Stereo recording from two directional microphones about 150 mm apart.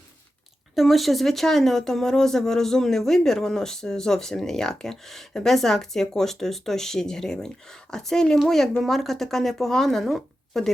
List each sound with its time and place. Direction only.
0.8 s speech: centre (ahead or behind)